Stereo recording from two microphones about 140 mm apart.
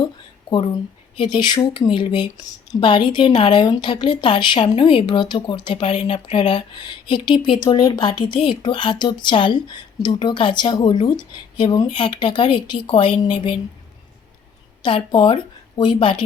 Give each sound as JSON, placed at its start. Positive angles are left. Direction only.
{"t": 0.5, "sound": "speech", "side_deg": 40}
{"t": 14.8, "sound": "a woman's voice", "side_deg": 35}